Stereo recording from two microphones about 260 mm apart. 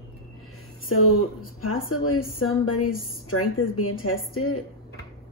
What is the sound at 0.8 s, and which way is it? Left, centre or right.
Speech, left.